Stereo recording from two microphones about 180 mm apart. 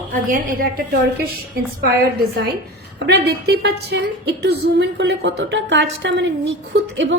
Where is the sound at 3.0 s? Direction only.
65° right (ahead or behind).